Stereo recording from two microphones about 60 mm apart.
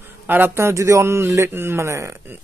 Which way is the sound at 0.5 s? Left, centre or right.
Right.